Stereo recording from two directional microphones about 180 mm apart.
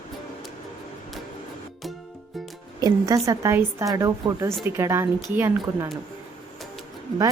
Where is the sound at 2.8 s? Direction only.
20° right (ahead or behind).